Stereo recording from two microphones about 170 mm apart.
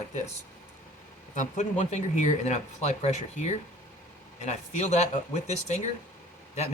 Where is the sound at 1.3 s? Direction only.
45° left (ahead or behind).